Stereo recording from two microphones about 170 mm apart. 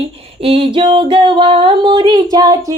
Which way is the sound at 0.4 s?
30° right (ahead or behind).